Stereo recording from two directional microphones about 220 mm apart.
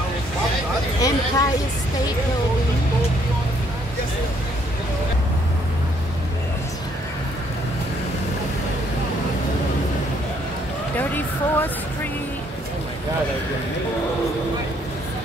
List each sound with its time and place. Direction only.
1.0 s speech: 15° left (ahead or behind)
11.0 s music: 10° left (ahead or behind)